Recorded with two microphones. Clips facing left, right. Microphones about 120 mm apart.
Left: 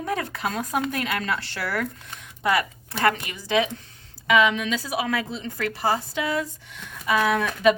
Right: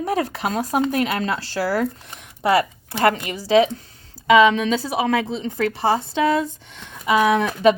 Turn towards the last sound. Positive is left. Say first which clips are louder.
# right 4 dB
turn(degrees=-30)  # may be behind; listen again after turning